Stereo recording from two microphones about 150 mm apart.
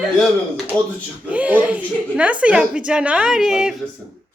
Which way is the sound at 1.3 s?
10° right (ahead or behind).